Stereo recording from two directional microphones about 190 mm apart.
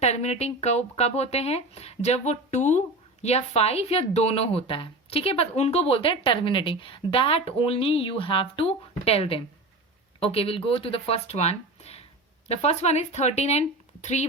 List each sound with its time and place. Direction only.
0.0 s speech: 35° left (ahead or behind)